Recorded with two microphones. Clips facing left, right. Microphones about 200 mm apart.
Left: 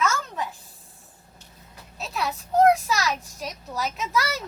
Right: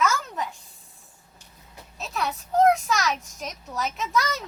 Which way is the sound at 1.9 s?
Centre (ahead or behind).